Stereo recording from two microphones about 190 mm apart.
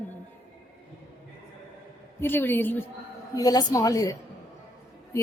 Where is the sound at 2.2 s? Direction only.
10° left (ahead or behind).